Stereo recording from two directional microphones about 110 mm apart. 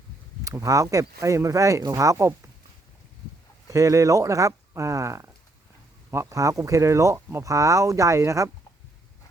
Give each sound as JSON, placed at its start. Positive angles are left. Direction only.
{"t": 0.4, "sound": "speech", "side_deg": -30}
{"t": 3.7, "sound": "speech", "side_deg": -30}